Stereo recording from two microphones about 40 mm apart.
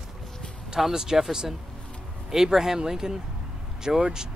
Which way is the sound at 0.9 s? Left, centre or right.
Centre.